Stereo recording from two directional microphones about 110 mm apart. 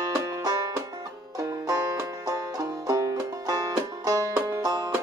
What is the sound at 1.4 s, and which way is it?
Banjo, 30° right (ahead or behind).